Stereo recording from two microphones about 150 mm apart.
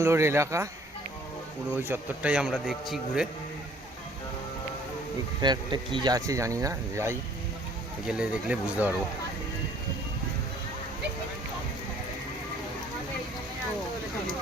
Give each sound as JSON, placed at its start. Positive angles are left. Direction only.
{"t": 0.0, "sound": "a man's voice", "side_deg": -15}
{"t": 1.7, "sound": "a man's voice", "side_deg": -15}
{"t": 5.4, "sound": "speech", "side_deg": -30}
{"t": 8.0, "sound": "a man's voice", "side_deg": -5}